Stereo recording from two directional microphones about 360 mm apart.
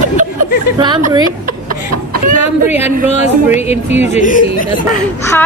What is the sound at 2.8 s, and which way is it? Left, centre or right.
Speech, centre.